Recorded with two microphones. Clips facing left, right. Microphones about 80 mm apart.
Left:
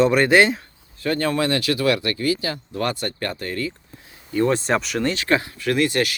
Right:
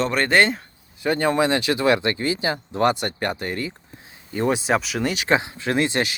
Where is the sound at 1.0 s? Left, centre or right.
Centre.